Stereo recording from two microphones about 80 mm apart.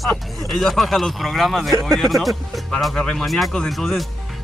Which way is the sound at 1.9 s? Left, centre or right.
Centre.